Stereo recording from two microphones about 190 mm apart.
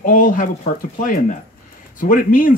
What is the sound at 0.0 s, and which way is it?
Speech, 45° left (ahead or behind).